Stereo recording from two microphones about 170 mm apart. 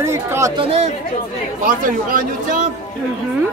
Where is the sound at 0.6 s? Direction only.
35° right (ahead or behind).